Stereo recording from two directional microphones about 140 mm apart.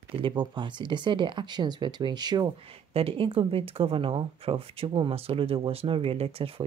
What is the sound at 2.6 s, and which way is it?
Speech, 45° right (ahead or behind).